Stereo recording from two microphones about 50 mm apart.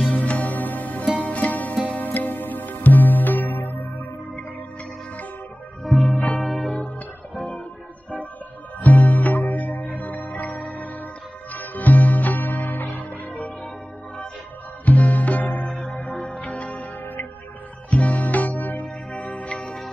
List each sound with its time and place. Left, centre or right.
0.1 s music: left
5.9 s music: centre
7.3 s music: left
8.8 s music: left
14.9 s music: left
19.6 s music: centre